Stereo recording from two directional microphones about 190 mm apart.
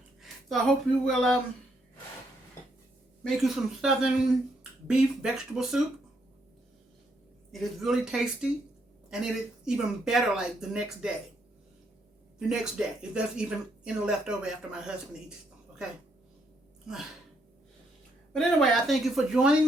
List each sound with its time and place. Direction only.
0.2 s a sound: centre (ahead or behind)
1.0 s speech: centre (ahead or behind)
3.2 s speech: centre (ahead or behind)
7.5 s speech: centre (ahead or behind)
12.4 s speech: 5° right (ahead or behind)
18.3 s speech: centre (ahead or behind)